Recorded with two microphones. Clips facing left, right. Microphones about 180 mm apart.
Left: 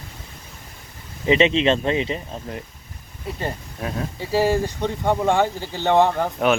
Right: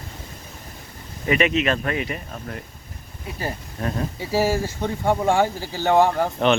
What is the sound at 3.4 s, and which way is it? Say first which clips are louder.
Speech: right 2 dB; centre (ahead or behind).